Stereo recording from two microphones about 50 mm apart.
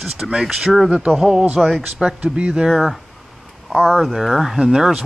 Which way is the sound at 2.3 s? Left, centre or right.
Centre.